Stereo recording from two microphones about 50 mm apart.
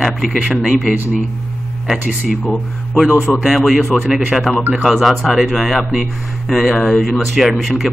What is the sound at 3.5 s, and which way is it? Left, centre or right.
Speech, centre.